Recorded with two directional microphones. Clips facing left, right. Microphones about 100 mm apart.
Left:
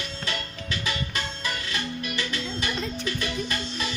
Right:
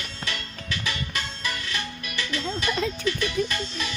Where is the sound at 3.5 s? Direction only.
30° left (ahead or behind).